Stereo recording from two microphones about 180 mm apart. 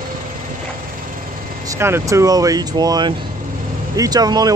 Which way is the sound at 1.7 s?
15° right (ahead or behind).